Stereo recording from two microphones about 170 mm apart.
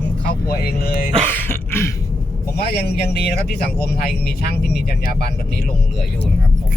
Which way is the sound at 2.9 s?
70° left (ahead or behind).